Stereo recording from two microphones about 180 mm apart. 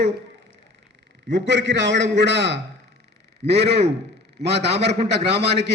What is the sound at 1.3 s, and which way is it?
A man's voice, 75° right (ahead or behind).